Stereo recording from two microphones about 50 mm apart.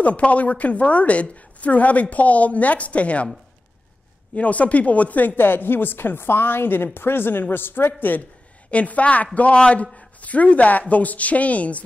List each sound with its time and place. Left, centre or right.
0.0 s a woman's voice: left
4.4 s speech: left
8.2 s a man's voice: left